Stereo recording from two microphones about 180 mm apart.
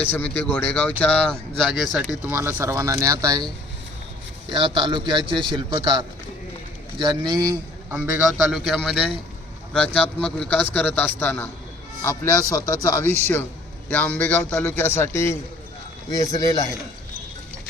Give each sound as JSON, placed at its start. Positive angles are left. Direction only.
{"t": 0.1, "sound": "a man's voice", "side_deg": 10}
{"t": 4.5, "sound": "a man's voice", "side_deg": -25}
{"t": 7.9, "sound": "a man's voice", "side_deg": -10}